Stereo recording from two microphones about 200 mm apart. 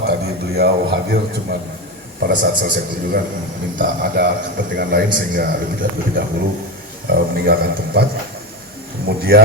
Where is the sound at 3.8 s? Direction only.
45° right (ahead or behind).